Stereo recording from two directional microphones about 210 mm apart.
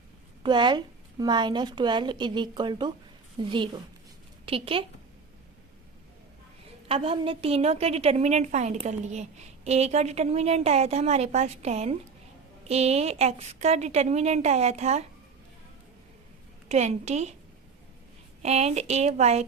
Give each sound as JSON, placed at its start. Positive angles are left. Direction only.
{"t": 0.4, "sound": "a woman's voice", "side_deg": -20}
{"t": 6.8, "sound": "a woman's voice", "side_deg": -25}
{"t": 16.6, "sound": "a woman's voice", "side_deg": -30}
{"t": 18.4, "sound": "a woman's voice", "side_deg": -30}